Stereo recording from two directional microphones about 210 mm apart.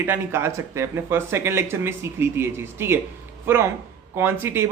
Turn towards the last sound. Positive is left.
turn(degrees=-10)  # may be behind; listen again after turning